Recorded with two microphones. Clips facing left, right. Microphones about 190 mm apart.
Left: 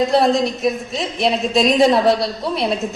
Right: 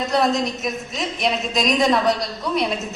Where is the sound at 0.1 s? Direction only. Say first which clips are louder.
Left 4 dB; 30° left (ahead or behind).